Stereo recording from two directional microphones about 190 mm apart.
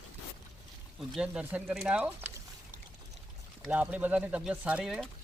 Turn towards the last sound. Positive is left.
turn(degrees=0)  # may be behind; listen again after turning